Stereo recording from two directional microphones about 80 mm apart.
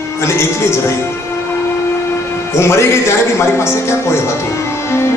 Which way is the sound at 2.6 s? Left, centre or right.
Left.